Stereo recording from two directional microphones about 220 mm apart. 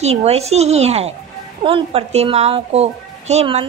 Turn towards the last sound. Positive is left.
turn(degrees=-30)  # may be behind; listen again after turning